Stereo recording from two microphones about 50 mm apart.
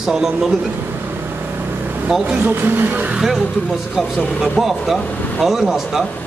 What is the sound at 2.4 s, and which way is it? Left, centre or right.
Speech, right.